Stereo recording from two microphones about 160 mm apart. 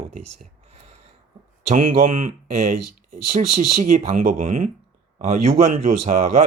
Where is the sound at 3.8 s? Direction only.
60° right (ahead or behind).